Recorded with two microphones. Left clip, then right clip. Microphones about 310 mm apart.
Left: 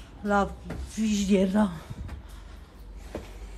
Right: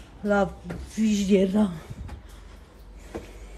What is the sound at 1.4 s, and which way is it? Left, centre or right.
Speech, centre.